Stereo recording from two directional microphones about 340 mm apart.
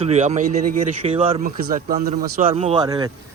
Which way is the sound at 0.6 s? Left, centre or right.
Right.